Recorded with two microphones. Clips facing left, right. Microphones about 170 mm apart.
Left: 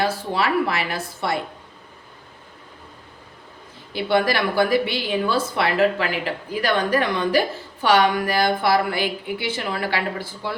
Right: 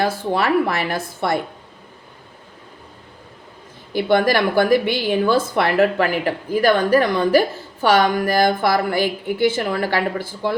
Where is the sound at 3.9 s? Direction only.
45° right (ahead or behind).